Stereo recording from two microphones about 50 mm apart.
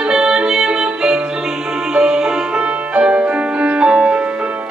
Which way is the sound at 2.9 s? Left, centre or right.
Right.